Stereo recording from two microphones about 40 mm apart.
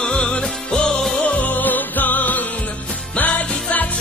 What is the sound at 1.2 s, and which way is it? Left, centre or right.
Music, left.